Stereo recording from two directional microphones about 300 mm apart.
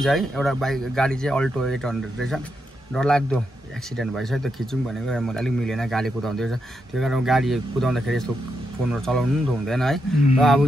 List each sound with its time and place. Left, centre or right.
0.0 s speech: centre